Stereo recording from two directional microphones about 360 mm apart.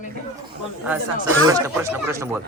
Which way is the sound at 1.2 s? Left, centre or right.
Centre.